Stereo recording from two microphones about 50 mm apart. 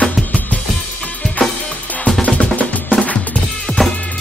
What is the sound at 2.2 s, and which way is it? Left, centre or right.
Music, left.